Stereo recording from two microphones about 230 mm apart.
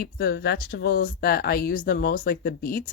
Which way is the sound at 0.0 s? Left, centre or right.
Left.